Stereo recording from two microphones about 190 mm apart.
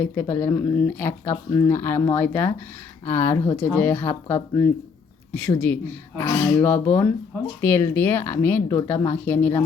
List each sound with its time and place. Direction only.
0.0 s speech: 10° left (ahead or behind)
5.3 s speech: 5° left (ahead or behind)